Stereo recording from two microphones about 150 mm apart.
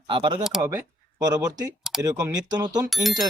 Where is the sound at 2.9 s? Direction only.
Centre (ahead or behind).